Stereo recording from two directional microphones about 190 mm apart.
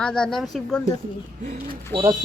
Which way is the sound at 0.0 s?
5° left (ahead or behind).